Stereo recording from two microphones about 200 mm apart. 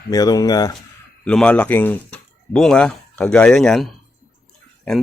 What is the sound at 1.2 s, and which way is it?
Speech, 5° left (ahead or behind).